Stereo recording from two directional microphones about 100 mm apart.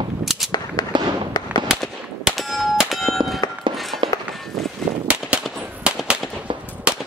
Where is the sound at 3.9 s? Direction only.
60° right (ahead or behind).